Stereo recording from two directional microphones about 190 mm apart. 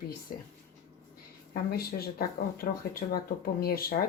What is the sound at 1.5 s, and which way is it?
Speech, 55° left (ahead or behind).